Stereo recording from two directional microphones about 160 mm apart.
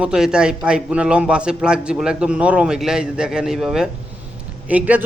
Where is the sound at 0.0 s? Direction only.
5° right (ahead or behind).